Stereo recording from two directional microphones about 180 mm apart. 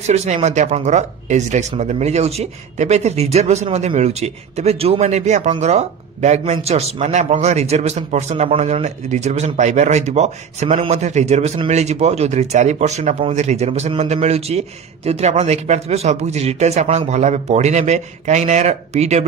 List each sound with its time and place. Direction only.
0.0 s speech: 40° right (ahead or behind)